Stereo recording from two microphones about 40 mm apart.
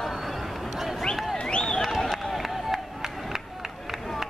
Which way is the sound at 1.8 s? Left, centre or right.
Centre.